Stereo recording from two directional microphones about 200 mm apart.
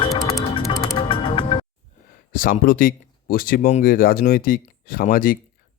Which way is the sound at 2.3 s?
45° left (ahead or behind).